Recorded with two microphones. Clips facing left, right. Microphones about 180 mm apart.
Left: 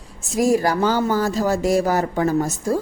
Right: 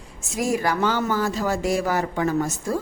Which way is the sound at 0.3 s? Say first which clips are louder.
Left 5 dB; 35° left (ahead or behind).